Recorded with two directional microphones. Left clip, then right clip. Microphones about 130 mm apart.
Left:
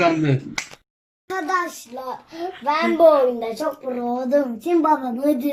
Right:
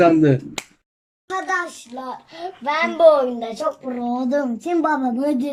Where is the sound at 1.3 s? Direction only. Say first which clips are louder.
Even; 20° right (ahead or behind).